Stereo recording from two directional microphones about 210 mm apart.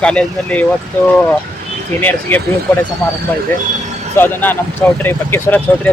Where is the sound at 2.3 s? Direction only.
10° left (ahead or behind).